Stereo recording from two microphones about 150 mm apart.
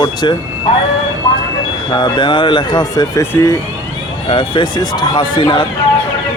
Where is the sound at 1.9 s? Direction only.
30° left (ahead or behind).